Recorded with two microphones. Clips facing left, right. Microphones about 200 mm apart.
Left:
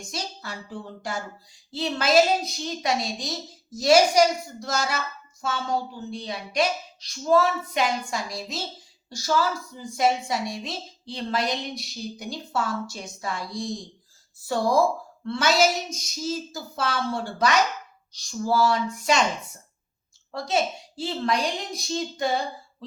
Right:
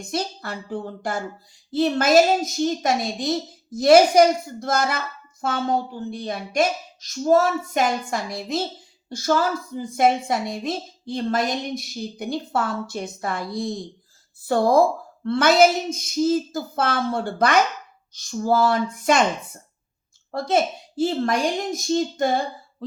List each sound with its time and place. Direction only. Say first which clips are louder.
0.0 s a woman's voice: right 7 dB; 55° right (ahead or behind)
20.3 s a woman's voice: right 4 dB; 55° right (ahead or behind)